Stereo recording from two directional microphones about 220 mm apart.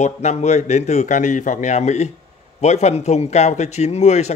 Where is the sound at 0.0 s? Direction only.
30° left (ahead or behind).